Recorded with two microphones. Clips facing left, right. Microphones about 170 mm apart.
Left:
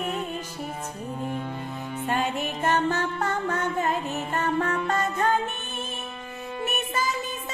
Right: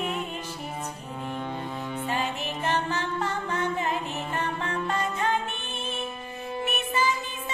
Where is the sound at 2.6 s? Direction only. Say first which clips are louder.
Left 4 dB; 45° left (ahead or behind).